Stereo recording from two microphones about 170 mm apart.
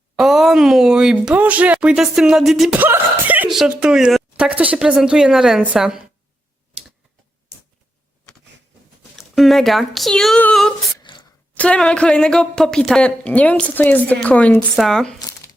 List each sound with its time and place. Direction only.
0.2 s speech: centre (ahead or behind)
9.1 s speech: centre (ahead or behind)
11.0 s a sound: 30° left (ahead or behind)
11.5 s speech: 5° left (ahead or behind)